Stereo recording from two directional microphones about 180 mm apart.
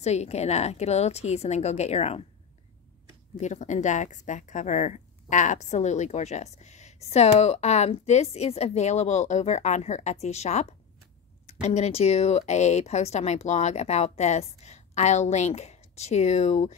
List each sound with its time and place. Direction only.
0.0 s speech: 35° left (ahead or behind)
3.3 s speech: 40° left (ahead or behind)